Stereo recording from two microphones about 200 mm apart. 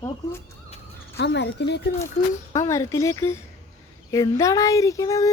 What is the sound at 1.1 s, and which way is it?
Speech, 60° left (ahead or behind).